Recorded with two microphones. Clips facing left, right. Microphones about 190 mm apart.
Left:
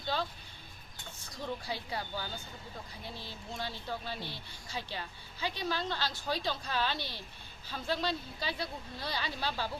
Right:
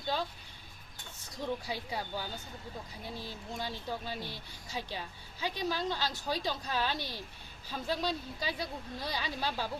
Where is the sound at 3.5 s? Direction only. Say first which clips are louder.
Right 1 dB; 15° right (ahead or behind).